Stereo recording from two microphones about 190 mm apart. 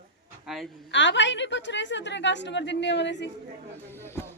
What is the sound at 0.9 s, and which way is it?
A woman's voice, 70° left (ahead or behind).